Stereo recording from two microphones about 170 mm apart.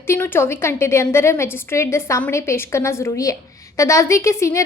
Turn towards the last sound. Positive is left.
turn(degrees=15)  # may be behind; listen again after turning